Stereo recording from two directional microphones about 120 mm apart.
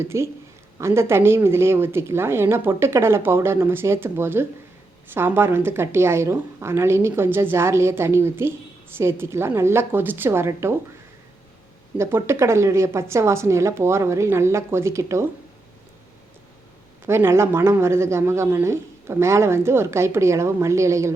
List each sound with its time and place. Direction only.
0.0 s a woman's voice: 20° right (ahead or behind)
11.9 s a woman's voice: 20° right (ahead or behind)
17.1 s a woman's voice: 20° right (ahead or behind)